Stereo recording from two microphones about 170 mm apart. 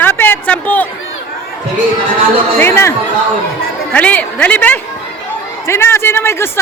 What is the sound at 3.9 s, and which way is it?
A woman's voice, 10° left (ahead or behind).